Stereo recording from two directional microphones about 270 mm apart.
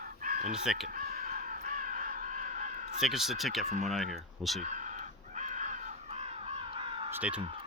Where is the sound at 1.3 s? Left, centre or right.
Right.